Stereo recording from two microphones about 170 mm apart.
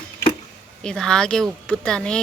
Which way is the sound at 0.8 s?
5° left (ahead or behind).